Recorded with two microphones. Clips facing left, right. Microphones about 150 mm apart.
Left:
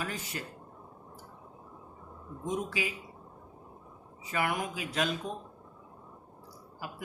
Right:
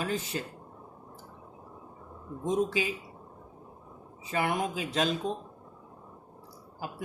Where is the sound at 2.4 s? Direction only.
25° right (ahead or behind).